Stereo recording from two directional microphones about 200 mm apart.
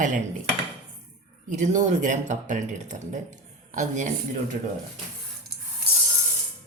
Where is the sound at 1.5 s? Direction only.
35° right (ahead or behind).